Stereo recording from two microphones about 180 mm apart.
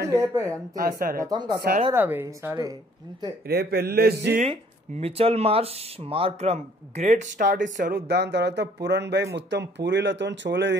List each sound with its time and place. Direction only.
0.1 s speech: 15° right (ahead or behind)
0.7 s speech: 55° right (ahead or behind)
1.1 s speech: 20° right (ahead or behind)
2.0 s speech: 10° right (ahead or behind)
3.4 s speech: 60° right (ahead or behind)
5.0 s speech: 35° right (ahead or behind)
8.1 s speech: 65° right (ahead or behind)